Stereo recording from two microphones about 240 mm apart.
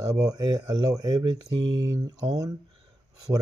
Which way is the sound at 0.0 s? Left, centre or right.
Centre.